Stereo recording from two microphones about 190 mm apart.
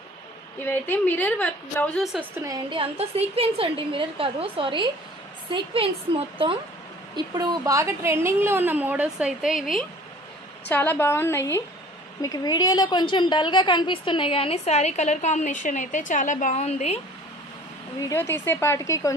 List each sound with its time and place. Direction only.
0.6 s a woman's voice: 10° left (ahead or behind)
2.1 s a woman's voice: 15° right (ahead or behind)
10.7 s a woman's voice: 10° left (ahead or behind); by 17.0 s 35° left (ahead or behind)
18.0 s a woman's voice: 15° left (ahead or behind)